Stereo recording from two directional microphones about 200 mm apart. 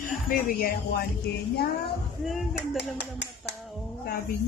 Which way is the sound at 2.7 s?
60° left (ahead or behind).